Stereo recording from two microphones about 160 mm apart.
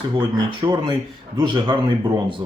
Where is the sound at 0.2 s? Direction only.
25° right (ahead or behind).